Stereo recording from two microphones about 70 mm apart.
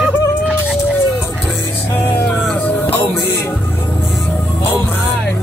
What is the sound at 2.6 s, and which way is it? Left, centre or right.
Music, left.